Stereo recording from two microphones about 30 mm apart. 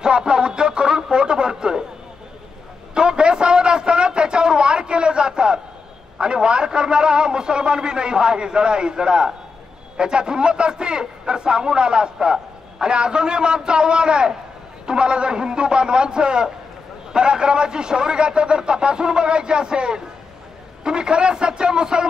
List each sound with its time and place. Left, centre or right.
0.0 s music: right
2.9 s a sound: right
6.1 s a man's voice: right